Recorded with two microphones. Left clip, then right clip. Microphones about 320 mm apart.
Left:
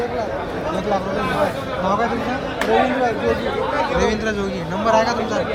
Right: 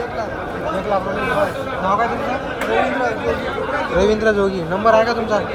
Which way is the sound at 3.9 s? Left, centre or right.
Centre.